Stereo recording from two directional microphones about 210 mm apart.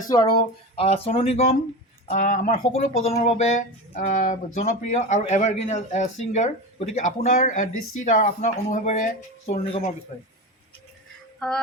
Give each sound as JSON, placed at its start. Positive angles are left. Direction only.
{"t": 0.1, "sound": "speech", "side_deg": 20}
{"t": 11.3, "sound": "music", "side_deg": 5}